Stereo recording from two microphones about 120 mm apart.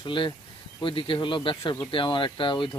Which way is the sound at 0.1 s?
45° left (ahead or behind).